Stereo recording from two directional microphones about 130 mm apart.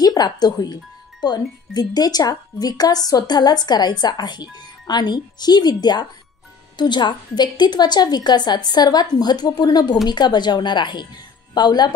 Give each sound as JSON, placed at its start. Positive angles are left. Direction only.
{"t": 0.0, "sound": "speech", "side_deg": 30}